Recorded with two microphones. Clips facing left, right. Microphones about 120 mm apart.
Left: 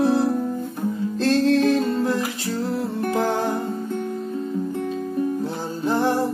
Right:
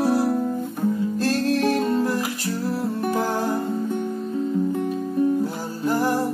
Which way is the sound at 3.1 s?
25° left (ahead or behind).